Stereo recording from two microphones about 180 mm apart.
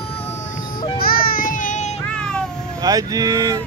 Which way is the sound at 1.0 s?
55° left (ahead or behind).